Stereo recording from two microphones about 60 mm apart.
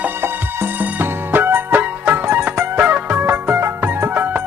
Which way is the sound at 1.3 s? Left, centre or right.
Right.